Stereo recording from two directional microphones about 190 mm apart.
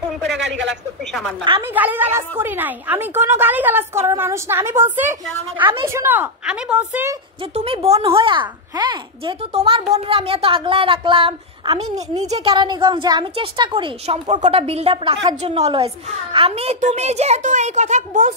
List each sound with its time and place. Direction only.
0.4 s a man's voice: 70° right (ahead or behind)
1.7 s a woman's voice: 10° right (ahead or behind)
7.5 s a woman's voice: 30° right (ahead or behind)